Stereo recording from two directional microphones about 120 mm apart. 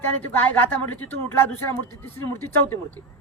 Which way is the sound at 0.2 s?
15° left (ahead or behind).